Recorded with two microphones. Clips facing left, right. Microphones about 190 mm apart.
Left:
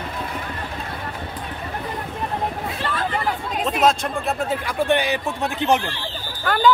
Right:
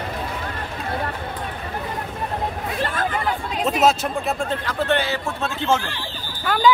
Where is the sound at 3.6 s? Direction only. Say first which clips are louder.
Right 1 dB; 5° right (ahead or behind); by 5.8 s 15° left (ahead or behind).